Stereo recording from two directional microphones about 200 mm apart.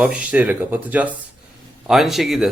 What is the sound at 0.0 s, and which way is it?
Speech, 5° right (ahead or behind).